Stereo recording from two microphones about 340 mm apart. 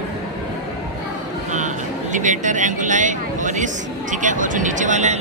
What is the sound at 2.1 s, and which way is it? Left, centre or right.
Speech, right.